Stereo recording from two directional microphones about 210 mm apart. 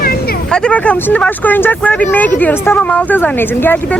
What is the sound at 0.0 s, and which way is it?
Vehicle, 45° left (ahead or behind).